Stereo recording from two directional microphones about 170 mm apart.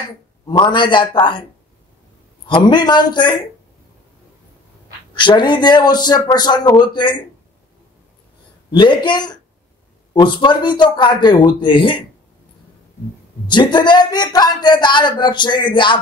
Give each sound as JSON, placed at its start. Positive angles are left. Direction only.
{"t": 0.5, "sound": "speech", "side_deg": 30}
{"t": 2.4, "sound": "speech", "side_deg": 25}
{"t": 5.1, "sound": "speech", "side_deg": 25}
{"t": 8.7, "sound": "speech", "side_deg": 25}
{"t": 13.5, "sound": "speech", "side_deg": 25}